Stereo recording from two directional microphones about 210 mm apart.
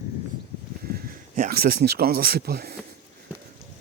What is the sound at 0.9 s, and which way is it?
Speech, 45° right (ahead or behind).